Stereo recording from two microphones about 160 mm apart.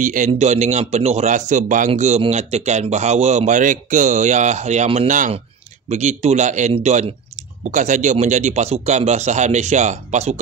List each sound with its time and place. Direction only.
0.0 s a man's voice: 55° right (ahead or behind)